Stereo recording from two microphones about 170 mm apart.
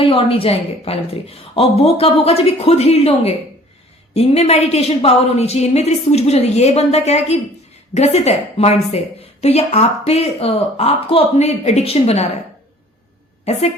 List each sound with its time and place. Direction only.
0.0 s a woman's voice: 35° left (ahead or behind)
13.4 s a woman's voice: 40° left (ahead or behind)